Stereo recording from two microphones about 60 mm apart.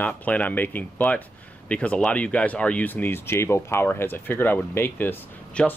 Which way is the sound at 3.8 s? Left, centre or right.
Left.